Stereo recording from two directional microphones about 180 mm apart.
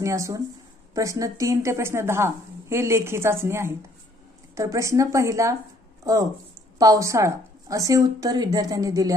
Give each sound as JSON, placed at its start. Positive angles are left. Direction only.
{"t": 0.0, "sound": "a woman's voice", "side_deg": -15}